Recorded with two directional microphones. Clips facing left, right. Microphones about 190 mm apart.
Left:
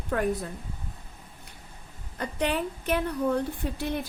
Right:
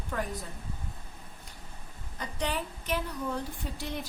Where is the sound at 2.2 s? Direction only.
60° left (ahead or behind).